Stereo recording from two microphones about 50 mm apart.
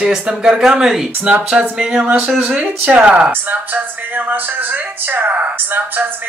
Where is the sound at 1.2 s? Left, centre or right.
Right.